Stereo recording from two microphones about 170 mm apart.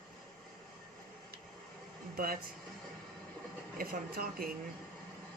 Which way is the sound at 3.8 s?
60° right (ahead or behind).